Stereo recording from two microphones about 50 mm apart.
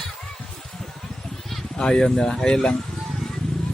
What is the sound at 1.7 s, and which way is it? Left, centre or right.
Speech, centre.